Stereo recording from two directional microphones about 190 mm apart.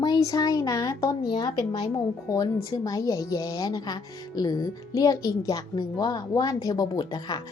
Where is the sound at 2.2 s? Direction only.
20° left (ahead or behind).